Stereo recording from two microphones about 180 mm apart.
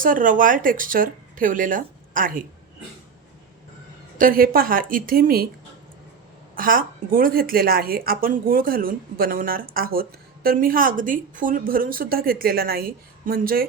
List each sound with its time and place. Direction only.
0.0 s a woman's voice: 50° right (ahead or behind)
4.2 s a woman's voice: 55° right (ahead or behind)
6.6 s a woman's voice: 50° right (ahead or behind)